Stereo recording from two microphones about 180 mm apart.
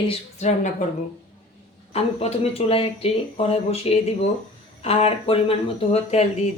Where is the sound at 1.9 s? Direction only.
35° left (ahead or behind).